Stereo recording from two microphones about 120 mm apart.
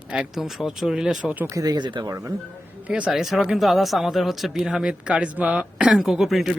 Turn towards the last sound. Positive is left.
turn(degrees=0)  # may be behind; listen again after turning